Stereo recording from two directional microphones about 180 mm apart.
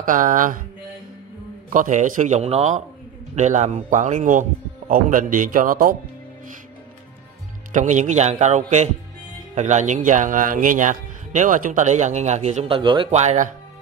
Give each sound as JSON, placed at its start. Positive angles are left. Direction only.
{"t": 0.0, "sound": "speech", "side_deg": -45}
{"t": 1.7, "sound": "speech", "side_deg": -45}
{"t": 7.7, "sound": "speech", "side_deg": -45}